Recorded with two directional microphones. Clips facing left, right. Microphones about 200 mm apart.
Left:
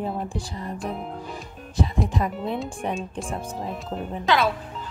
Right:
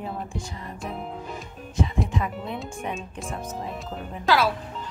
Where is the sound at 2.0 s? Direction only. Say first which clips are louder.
Left 3 dB; 35° left (ahead or behind).